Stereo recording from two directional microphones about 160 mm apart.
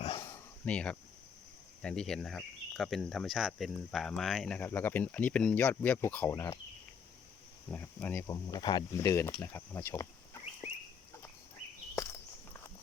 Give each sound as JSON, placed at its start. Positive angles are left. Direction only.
{"t": 0.6, "sound": "speech", "side_deg": 5}
{"t": 7.7, "sound": "speech", "side_deg": 10}
{"t": 8.4, "sound": "speech", "side_deg": 25}